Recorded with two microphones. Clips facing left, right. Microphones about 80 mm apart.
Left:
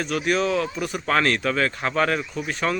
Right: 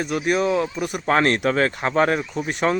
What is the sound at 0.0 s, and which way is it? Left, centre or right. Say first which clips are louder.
Speech: right 2 dB; centre.